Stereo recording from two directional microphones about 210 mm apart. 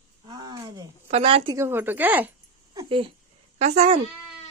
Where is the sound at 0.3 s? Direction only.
20° right (ahead or behind).